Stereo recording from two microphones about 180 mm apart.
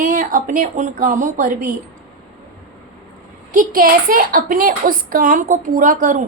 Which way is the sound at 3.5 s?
50° right (ahead or behind).